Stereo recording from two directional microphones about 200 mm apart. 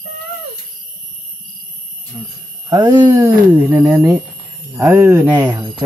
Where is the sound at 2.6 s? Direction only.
20° right (ahead or behind).